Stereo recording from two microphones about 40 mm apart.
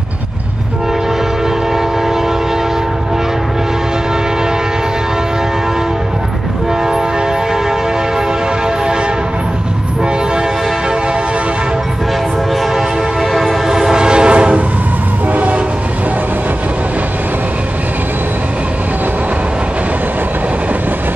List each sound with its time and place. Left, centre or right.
12.7 s train: centre
13.7 s train: centre
15.3 s train: right